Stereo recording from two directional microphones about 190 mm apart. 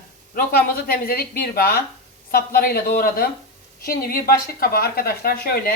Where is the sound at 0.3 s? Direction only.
55° left (ahead or behind).